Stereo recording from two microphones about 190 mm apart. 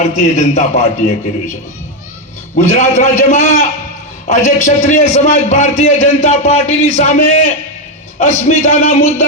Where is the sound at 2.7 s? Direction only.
40° left (ahead or behind).